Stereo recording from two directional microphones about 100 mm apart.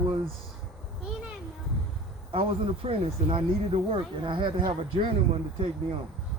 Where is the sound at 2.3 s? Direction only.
70° right (ahead or behind); by 4.7 s 55° right (ahead or behind).